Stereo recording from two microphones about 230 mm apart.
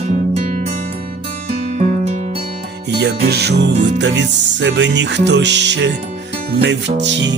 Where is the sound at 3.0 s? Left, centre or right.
Right.